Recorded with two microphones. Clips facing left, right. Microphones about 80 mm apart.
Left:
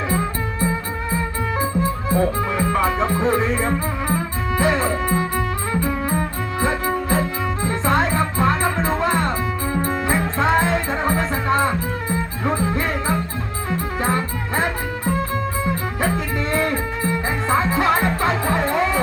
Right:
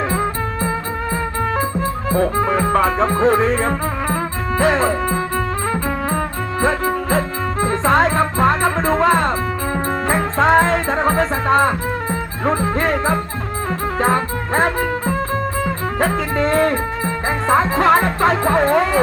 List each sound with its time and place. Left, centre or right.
0.1 s music: right
2.1 s music: right